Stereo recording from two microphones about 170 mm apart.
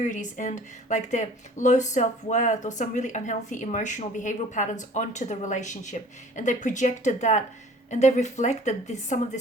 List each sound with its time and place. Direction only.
0.0 s speech: 50° left (ahead or behind)